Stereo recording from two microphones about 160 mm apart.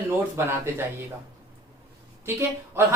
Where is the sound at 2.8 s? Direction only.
15° right (ahead or behind).